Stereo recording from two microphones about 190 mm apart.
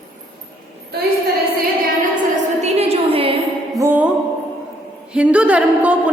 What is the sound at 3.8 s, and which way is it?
Music, 10° right (ahead or behind).